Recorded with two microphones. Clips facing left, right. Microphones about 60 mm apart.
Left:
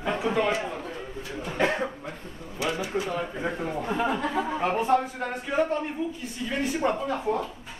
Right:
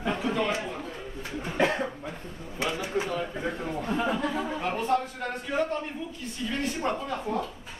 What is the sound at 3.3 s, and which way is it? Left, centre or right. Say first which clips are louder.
A man's voice: left 2 dB; centre.